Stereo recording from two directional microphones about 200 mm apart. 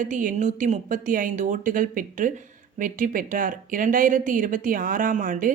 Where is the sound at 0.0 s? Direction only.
40° right (ahead or behind).